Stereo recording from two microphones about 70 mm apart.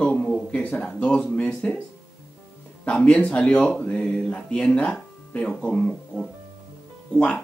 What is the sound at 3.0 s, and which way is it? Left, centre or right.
Speech, centre.